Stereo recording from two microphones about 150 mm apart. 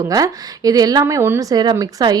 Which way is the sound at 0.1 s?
25° right (ahead or behind).